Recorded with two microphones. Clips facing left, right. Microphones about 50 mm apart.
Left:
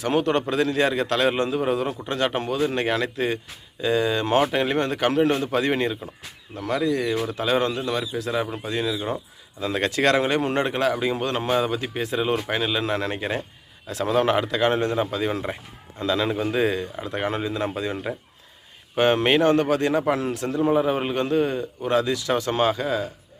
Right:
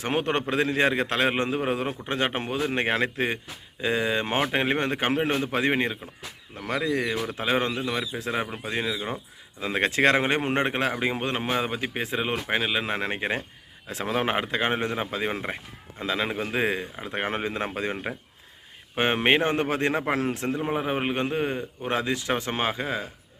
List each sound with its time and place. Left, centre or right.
0.0 s a man's voice: right